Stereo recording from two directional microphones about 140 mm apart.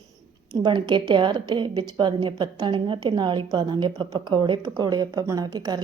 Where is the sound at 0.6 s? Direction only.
35° right (ahead or behind).